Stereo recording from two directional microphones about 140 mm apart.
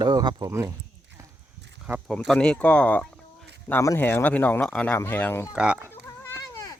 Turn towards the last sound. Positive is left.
turn(degrees=20)  # may be behind; listen again after turning